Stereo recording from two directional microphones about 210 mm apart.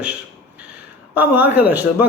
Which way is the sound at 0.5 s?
5° right (ahead or behind).